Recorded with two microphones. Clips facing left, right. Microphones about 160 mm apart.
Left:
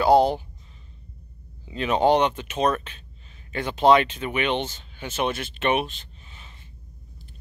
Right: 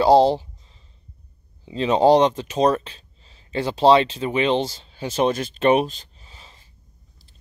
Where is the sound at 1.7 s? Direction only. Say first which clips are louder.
Right 4 dB; 30° right (ahead or behind).